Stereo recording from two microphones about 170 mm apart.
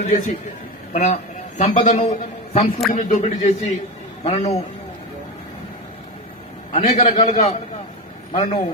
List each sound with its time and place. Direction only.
0.0 s a man's voice: 40° left (ahead or behind)
6.7 s a man's voice: 40° left (ahead or behind)